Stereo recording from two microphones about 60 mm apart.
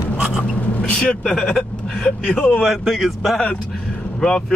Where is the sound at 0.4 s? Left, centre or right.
Centre.